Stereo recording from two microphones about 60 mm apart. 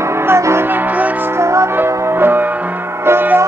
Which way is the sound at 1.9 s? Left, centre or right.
Right.